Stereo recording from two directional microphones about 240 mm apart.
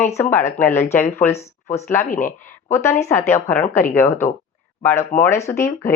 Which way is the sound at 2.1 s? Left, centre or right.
Left.